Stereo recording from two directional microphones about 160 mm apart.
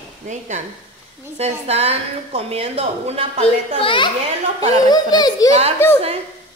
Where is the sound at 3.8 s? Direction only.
30° left (ahead or behind).